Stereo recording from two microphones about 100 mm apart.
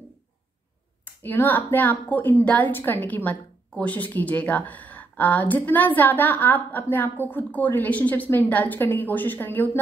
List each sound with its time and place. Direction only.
1.0 s speech: 20° left (ahead or behind)